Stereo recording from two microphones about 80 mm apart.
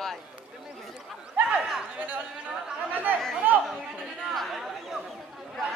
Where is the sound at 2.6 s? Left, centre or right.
Right.